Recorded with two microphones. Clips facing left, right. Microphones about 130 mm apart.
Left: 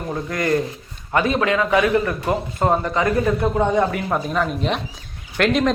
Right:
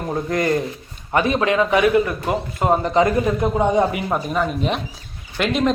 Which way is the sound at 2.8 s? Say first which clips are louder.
Right 2 dB; 20° right (ahead or behind).